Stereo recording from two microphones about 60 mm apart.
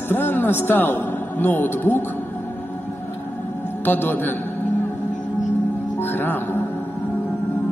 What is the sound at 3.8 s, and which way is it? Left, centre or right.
Speech, left.